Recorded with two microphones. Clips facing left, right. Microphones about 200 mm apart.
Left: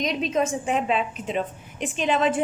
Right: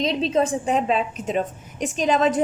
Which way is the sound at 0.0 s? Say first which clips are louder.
Right 3 dB; 30° right (ahead or behind).